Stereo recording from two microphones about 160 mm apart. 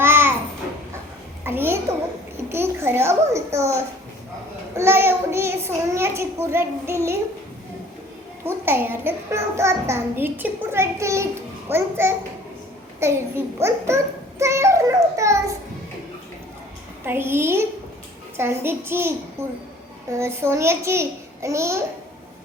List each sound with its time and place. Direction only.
0.0 s babbling: 15° right (ahead or behind)
1.5 s a sound: 15° right (ahead or behind)
8.4 s a child's voice: 15° right (ahead or behind)
17.1 s a child's voice: 15° right (ahead or behind)